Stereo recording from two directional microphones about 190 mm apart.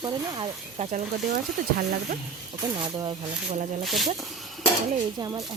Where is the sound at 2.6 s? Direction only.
20° right (ahead or behind).